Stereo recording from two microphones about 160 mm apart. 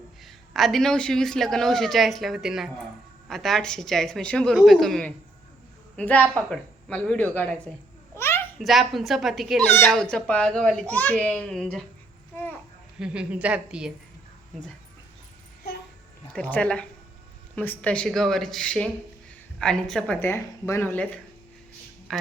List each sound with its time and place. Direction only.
0.3 s a man's voice: centre (ahead or behind)
8.2 s a sound: 15° left (ahead or behind)
8.5 s a man's voice: centre (ahead or behind)
9.6 s a man's voice: 15° left (ahead or behind)
13.0 s a man's voice: 5° right (ahead or behind)
16.3 s a man's voice: 10° left (ahead or behind)
22.1 s speech: centre (ahead or behind)